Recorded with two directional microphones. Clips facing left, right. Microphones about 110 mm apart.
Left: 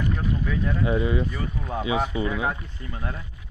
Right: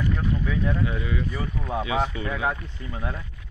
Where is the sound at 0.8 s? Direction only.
25° left (ahead or behind).